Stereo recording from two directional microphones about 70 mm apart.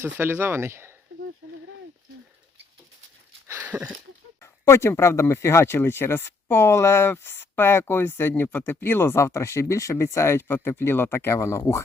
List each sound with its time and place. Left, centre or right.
0.0 s speech: right
3.6 s a sound: right
4.4 s speech: left